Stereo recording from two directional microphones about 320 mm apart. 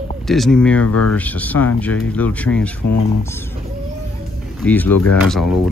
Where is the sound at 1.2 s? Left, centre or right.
Centre.